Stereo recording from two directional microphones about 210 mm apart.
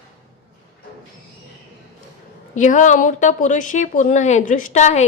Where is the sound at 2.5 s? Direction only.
35° left (ahead or behind).